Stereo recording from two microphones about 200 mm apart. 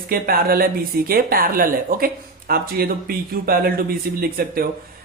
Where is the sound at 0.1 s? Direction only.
50° right (ahead or behind).